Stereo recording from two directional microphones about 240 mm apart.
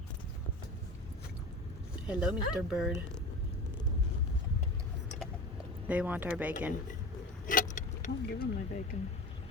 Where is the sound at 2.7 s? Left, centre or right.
Centre.